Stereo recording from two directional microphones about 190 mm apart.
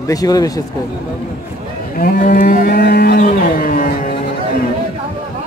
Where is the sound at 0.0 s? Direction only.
20° left (ahead or behind).